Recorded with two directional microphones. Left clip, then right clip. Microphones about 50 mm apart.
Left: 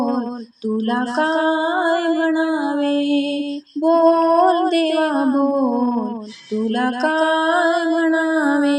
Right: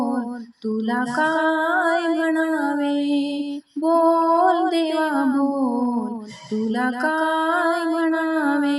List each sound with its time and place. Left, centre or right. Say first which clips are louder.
0.9 s female singing: left 2 dB; left
1.2 s music: left 2 dB; centre
2.8 s music: left 3 dB; left